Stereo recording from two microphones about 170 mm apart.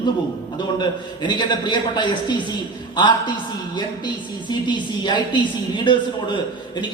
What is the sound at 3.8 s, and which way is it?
A woman's voice, 25° left (ahead or behind).